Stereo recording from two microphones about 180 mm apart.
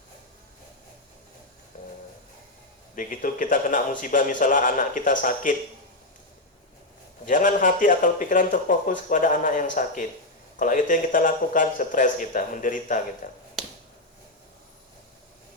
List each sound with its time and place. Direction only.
2.9 s speech: 45° left (ahead or behind)
7.3 s speech: 45° left (ahead or behind)
13.6 s finger snapping: centre (ahead or behind)